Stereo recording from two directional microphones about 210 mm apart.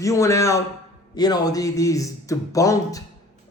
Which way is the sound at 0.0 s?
15° left (ahead or behind).